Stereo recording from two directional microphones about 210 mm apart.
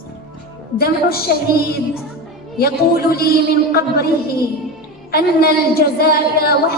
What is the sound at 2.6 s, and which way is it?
Speech, 45° left (ahead or behind).